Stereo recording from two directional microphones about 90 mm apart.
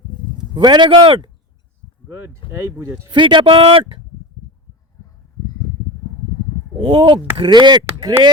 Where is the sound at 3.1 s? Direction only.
60° right (ahead or behind); by 4.0 s 85° right.